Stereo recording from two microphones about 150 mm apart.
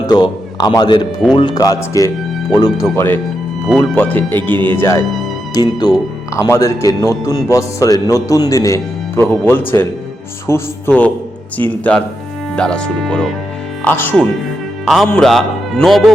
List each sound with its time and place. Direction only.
0.1 s a man's voice: 25° left (ahead or behind)
5.5 s speech: 30° left (ahead or behind)
14.8 s a man's voice: centre (ahead or behind)